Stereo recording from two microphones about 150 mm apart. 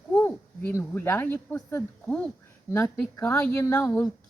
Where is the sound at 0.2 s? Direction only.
15° left (ahead or behind).